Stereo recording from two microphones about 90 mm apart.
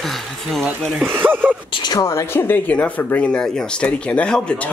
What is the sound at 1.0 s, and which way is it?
Speech, 25° right (ahead or behind).